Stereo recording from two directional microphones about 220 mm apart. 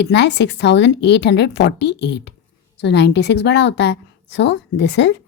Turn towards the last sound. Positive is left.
turn(degrees=50)  # may be behind; listen again after turning